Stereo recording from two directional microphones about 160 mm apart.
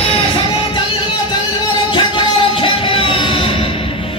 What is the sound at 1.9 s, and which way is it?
Music, 30° left (ahead or behind).